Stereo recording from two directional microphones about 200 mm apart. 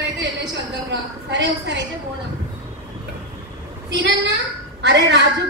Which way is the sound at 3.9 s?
60° right (ahead or behind).